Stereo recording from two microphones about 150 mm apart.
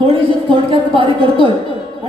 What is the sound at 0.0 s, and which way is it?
A woman's voice, 35° right (ahead or behind).